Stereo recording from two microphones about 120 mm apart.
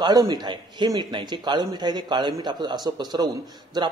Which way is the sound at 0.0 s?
35° right (ahead or behind).